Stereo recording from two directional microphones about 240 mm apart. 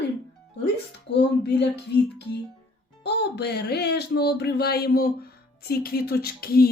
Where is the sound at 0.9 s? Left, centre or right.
Left.